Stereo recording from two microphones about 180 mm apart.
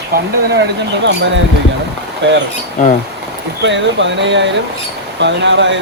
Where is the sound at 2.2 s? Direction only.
90° right.